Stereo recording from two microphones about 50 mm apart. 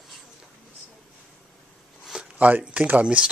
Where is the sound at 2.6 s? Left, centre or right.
Right.